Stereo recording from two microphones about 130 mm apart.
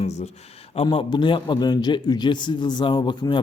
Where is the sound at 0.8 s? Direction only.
40° left (ahead or behind).